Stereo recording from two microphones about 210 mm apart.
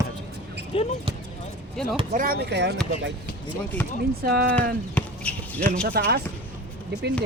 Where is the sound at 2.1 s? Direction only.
45° right (ahead or behind).